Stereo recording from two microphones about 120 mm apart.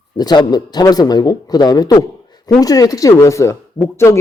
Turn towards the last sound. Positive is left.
turn(degrees=25)  # may be behind; listen again after turning